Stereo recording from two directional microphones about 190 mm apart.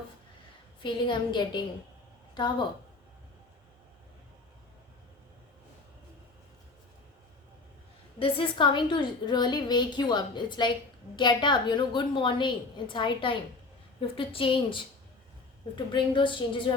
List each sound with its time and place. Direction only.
0.8 s a woman's voice: 25° left (ahead or behind)
8.2 s a woman's voice: 25° left (ahead or behind)